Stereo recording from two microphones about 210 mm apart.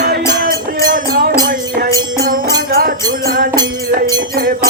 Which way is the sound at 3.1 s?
45° right (ahead or behind).